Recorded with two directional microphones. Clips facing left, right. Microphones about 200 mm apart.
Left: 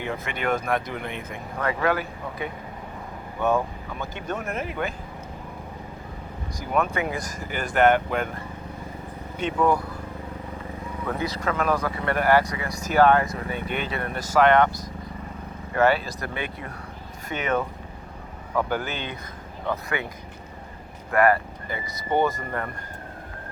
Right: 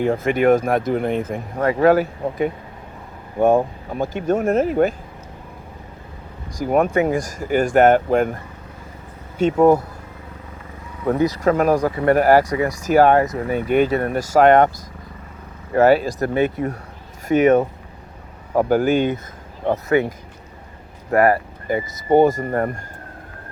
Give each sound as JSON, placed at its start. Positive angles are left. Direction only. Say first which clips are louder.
{"t": 0.0, "sound": "speech", "louder": "right 12 dB", "side_deg": -45}
{"t": 6.7, "sound": "speech", "louder": "right 8 dB", "side_deg": -45}
{"t": 9.4, "sound": "speech", "louder": "right 9 dB", "side_deg": -45}
{"t": 11.0, "sound": "speech", "louder": "right 10 dB", "side_deg": -40}
{"t": 15.7, "sound": "speech", "louder": "right 7 dB", "side_deg": -40}
{"t": 21.7, "sound": "speech", "louder": "right 10 dB", "side_deg": -45}